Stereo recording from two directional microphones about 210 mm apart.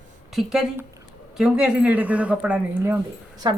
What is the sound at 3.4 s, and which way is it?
Speech, 20° right (ahead or behind).